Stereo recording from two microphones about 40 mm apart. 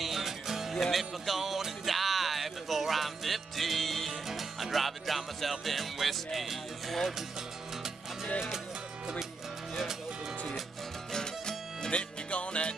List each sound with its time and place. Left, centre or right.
0.0 s music: centre
11.1 s music: centre
11.9 s music: left